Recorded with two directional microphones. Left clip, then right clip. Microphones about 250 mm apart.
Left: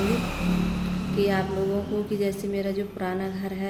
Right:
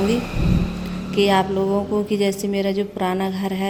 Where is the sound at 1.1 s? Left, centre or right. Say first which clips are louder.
Right 8 dB; right.